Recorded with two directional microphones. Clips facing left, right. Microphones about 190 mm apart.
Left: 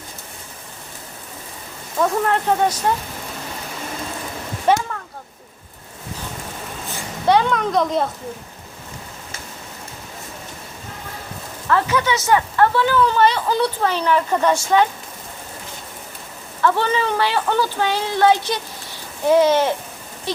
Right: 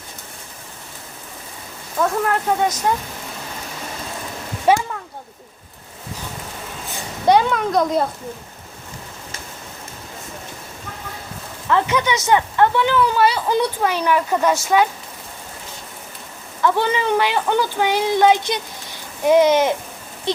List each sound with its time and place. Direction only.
2.0 s speech: centre (ahead or behind)
4.7 s a sound: 10° right (ahead or behind)
7.3 s speech: 10° right (ahead or behind)
11.7 s speech: 20° right (ahead or behind)
16.6 s speech: 15° right (ahead or behind)